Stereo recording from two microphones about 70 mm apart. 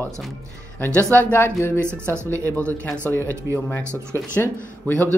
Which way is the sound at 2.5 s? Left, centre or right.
Centre.